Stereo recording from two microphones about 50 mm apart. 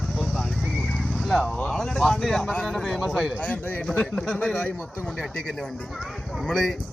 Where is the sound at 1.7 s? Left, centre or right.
Centre.